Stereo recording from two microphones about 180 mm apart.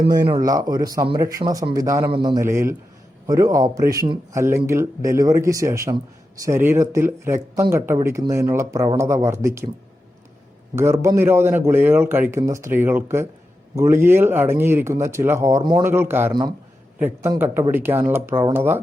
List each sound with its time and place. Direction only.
0.4 s a man's voice: 20° right (ahead or behind)
2.4 s speech: 15° right (ahead or behind)
10.8 s speech: 15° right (ahead or behind)
16.3 s a man's voice: 25° right (ahead or behind)
17.0 s speech: 10° right (ahead or behind)